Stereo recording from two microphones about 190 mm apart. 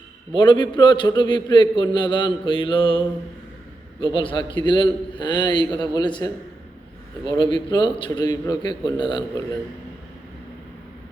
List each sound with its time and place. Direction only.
0.3 s a man's voice: 25° left (ahead or behind)
4.0 s a man's voice: 25° left (ahead or behind)
7.5 s a man's voice: 25° left (ahead or behind)